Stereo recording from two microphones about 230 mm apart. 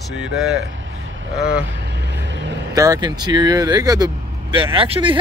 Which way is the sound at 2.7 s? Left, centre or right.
Centre.